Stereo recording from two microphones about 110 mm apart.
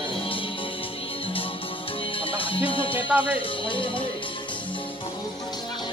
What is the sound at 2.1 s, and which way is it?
Music, 55° left (ahead or behind).